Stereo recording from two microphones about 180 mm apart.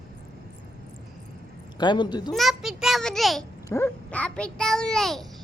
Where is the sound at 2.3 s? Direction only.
Centre (ahead or behind).